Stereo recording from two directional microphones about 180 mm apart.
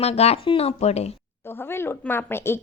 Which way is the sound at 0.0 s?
35° left (ahead or behind).